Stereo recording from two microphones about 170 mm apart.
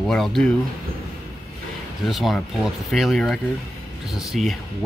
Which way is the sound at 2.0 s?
Centre (ahead or behind).